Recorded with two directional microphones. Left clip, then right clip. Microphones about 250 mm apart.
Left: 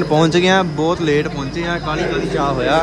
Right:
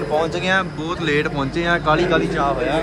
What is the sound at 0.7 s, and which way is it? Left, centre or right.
Speech, centre.